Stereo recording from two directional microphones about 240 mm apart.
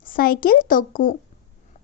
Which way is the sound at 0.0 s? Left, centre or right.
Left.